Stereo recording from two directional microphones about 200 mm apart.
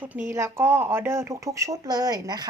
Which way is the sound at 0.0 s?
10° right (ahead or behind).